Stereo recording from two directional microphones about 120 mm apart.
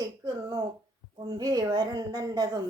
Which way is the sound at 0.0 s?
35° right (ahead or behind).